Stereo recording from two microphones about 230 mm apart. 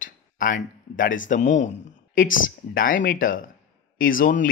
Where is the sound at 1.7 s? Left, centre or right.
Left.